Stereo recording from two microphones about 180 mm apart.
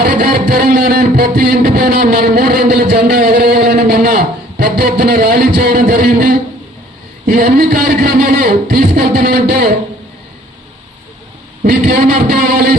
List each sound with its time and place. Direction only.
0.0 s guitar: 55° right (ahead or behind)
7.3 s a man's voice: 50° right (ahead or behind)
11.6 s a sound: 55° right (ahead or behind)